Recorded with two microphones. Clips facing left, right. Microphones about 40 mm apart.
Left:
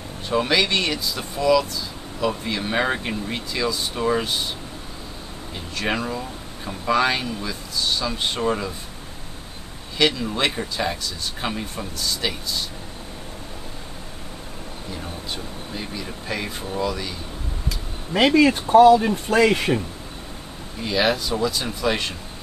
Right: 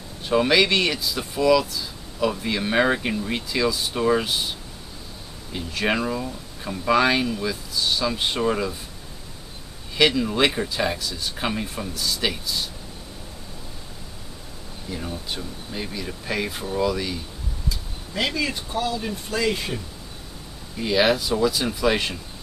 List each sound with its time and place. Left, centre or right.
0.3 s speech: centre
5.5 s speech: centre
9.9 s speech: centre
15.0 s speech: centre
17.6 s speech: left
20.8 s speech: centre